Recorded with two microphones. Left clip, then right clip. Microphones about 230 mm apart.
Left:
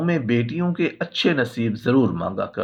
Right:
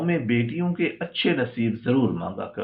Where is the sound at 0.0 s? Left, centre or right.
Left.